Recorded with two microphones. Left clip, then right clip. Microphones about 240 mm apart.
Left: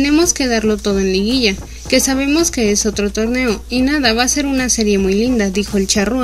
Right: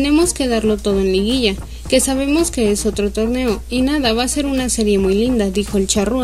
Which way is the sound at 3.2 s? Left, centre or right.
Left.